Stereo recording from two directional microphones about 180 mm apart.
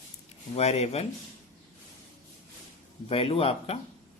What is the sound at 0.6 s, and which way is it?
Speech, 35° left (ahead or behind).